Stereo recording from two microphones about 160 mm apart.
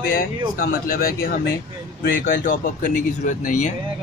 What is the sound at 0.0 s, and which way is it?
Speech, 65° left (ahead or behind).